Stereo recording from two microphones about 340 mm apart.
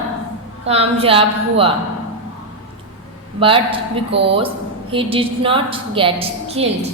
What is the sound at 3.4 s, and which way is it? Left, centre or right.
A woman's voice, centre.